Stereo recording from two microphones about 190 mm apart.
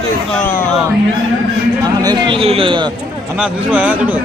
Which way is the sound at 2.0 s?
20° right (ahead or behind).